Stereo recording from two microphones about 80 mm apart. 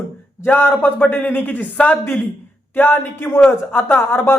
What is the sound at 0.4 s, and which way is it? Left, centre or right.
Speech, left.